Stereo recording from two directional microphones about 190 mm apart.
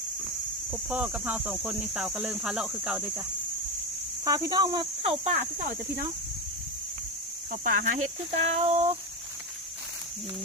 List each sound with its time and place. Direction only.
0.7 s speech: 5° right (ahead or behind)
4.3 s cricket: 20° right (ahead or behind); by 6.1 s 40° right (ahead or behind)
7.5 s speech: 45° right (ahead or behind)
8.5 s a sound: 35° right (ahead or behind)